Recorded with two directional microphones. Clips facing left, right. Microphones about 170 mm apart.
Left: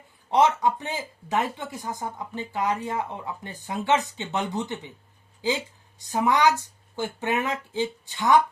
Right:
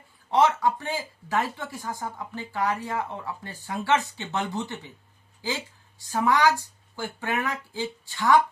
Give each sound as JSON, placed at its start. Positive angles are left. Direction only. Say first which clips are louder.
{"t": 0.3, "sound": "speech", "louder": "left 1 dB", "side_deg": 20}